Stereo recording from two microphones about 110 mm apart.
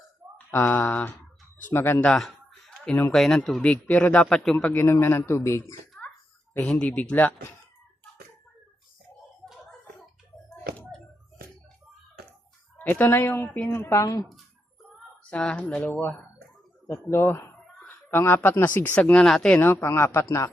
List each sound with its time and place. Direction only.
0.3 s speech: 15° left (ahead or behind)
2.0 s a sound: 5° left (ahead or behind)
3.1 s a man's voice: centre (ahead or behind)
4.7 s speech: 20° left (ahead or behind)
6.0 s a sound: 15° left (ahead or behind)
6.5 s a man's voice: 10° left (ahead or behind)
9.5 s a sound: centre (ahead or behind)
10.5 s music: 10° left (ahead or behind)
12.8 s speech: 15° left (ahead or behind); by 14.3 s 30° left (ahead or behind)
15.3 s a man's voice: 10° left (ahead or behind)
17.8 s a sound: 20° left (ahead or behind)
18.6 s a man's voice: 15° left (ahead or behind)
19.5 s speech: 20° left (ahead or behind)